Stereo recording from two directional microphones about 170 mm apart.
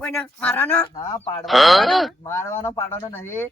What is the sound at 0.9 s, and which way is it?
Speech, 20° left (ahead or behind).